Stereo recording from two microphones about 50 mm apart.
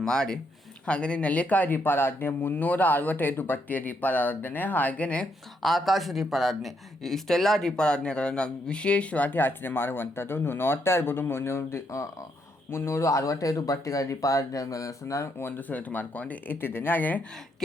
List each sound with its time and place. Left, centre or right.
0.0 s speech: centre
5.6 s speech: centre; by 15.3 s left
15.4 s speech: left
15.7 s speech: left
16.6 s speech: left